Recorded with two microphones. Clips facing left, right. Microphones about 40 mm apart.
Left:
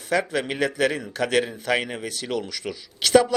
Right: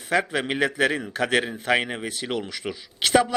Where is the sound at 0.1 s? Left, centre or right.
Right.